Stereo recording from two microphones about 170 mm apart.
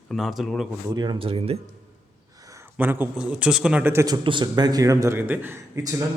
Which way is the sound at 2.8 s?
10° right (ahead or behind).